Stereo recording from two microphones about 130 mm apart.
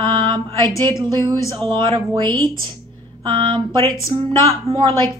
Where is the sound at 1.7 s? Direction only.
35° right (ahead or behind).